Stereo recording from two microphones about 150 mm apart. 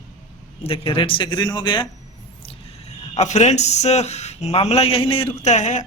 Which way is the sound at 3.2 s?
50° left (ahead or behind).